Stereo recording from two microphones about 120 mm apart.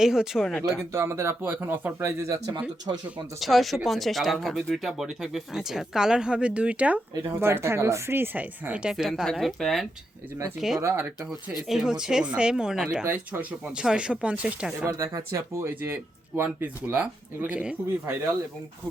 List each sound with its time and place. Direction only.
0.0 s speech: 5° right (ahead or behind)
0.9 s speech: 20° right (ahead or behind)
3.4 s speech: centre (ahead or behind)
10.8 s speech: 20° right (ahead or behind)
11.7 s speech: 5° right (ahead or behind)
14.8 s speech: 25° right (ahead or behind); by 17.7 s 10° right (ahead or behind)